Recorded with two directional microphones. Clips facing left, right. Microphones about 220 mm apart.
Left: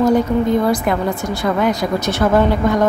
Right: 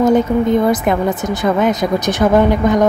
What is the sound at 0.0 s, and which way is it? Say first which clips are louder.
A woman's voice: right 2 dB; 20° right (ahead or behind).